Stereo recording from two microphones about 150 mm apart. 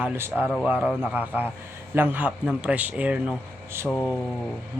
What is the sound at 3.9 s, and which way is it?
Speech, 10° left (ahead or behind).